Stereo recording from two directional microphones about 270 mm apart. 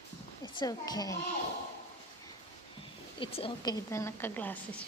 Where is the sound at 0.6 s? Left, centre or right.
Centre.